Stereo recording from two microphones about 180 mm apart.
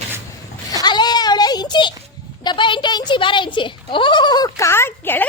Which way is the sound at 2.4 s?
25° left (ahead or behind).